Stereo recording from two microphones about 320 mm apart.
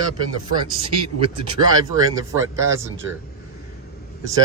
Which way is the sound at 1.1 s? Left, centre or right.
Centre.